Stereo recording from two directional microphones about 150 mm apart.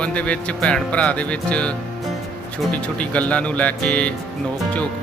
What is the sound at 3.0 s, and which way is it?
Speech, 10° left (ahead or behind).